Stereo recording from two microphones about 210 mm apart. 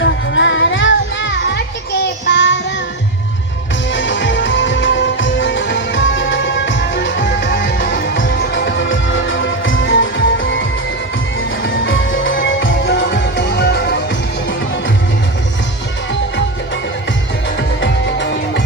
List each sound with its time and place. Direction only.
0.0 s music: 60° left (ahead or behind)
2.2 s child singing: 60° left (ahead or behind)
3.9 s music: 60° left (ahead or behind)
7.9 s music: 45° left (ahead or behind)
17.6 s music: 55° left (ahead or behind)